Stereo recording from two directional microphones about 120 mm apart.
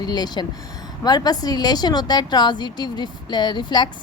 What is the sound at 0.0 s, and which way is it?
A woman's voice, 35° left (ahead or behind).